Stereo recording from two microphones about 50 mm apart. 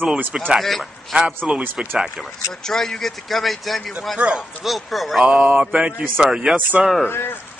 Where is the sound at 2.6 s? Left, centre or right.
Centre.